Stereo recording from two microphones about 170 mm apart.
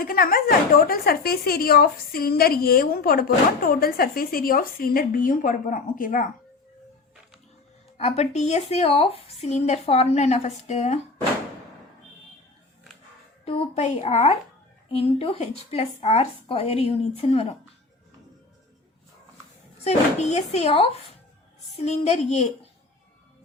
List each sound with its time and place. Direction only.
0.0 s speech: 60° left (ahead or behind)
7.9 s speech: 40° left (ahead or behind)
13.4 s a woman's voice: 40° left (ahead or behind)
19.8 s speech: 40° left (ahead or behind)